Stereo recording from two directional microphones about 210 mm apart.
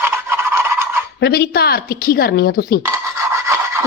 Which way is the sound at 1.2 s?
50° left (ahead or behind).